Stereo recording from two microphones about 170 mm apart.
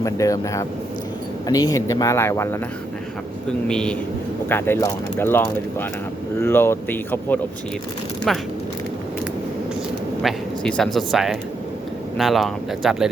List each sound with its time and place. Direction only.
0.0 s speech: 20° left (ahead or behind)
3.7 s speech: 5° left (ahead or behind)
10.2 s speech: 5° left (ahead or behind)